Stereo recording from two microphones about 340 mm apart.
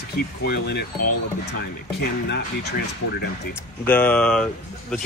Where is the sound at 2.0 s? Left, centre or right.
Left.